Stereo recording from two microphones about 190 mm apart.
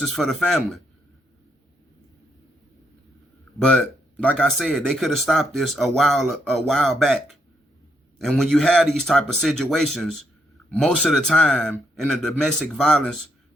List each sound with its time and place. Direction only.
0.0 s speech: centre (ahead or behind)
3.6 s speech: 5° left (ahead or behind)